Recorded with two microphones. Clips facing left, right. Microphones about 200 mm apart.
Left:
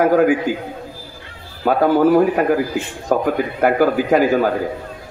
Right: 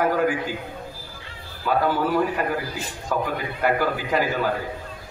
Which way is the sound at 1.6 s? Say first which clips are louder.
Left 8 dB; 45° left (ahead or behind).